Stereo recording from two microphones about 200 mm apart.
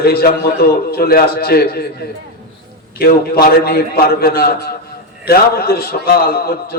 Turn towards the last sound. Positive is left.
turn(degrees=50)  # may be behind; listen again after turning